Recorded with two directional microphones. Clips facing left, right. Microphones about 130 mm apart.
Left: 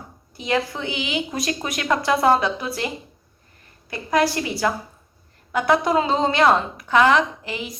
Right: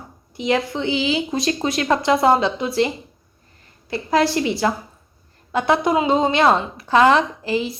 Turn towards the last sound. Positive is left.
turn(degrees=-30)  # may be behind; listen again after turning